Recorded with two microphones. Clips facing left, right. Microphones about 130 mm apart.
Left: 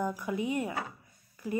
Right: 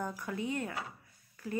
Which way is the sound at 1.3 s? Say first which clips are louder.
Left 4 dB; 15° left (ahead or behind).